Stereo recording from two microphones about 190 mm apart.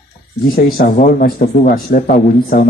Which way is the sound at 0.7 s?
50° left (ahead or behind).